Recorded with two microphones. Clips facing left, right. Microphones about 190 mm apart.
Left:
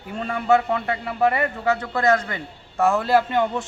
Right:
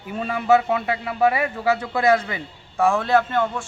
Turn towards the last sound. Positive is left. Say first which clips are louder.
# even
turn(degrees=15)  # may be behind; listen again after turning